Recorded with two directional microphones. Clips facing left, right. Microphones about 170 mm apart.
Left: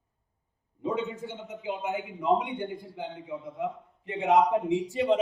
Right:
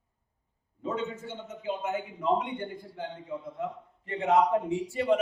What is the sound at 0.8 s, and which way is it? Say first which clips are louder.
A man's voice: left 2 dB; 15° left (ahead or behind).